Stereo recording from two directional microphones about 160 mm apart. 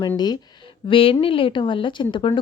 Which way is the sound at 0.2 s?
30° left (ahead or behind).